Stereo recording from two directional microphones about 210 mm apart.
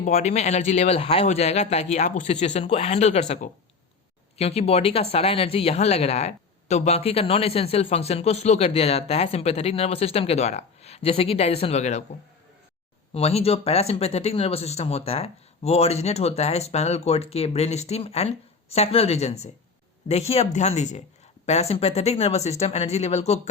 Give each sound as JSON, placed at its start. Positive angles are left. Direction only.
{"t": 0.0, "sound": "speech", "side_deg": 30}
{"t": 13.1, "sound": "speech", "side_deg": 30}